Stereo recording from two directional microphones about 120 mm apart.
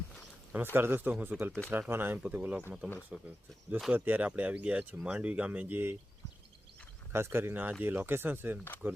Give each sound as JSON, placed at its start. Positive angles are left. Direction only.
{"t": 0.5, "sound": "speech", "side_deg": -20}
{"t": 7.1, "sound": "speech", "side_deg": -20}